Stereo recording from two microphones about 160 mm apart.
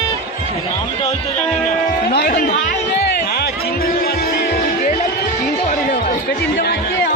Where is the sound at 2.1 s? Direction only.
80° left.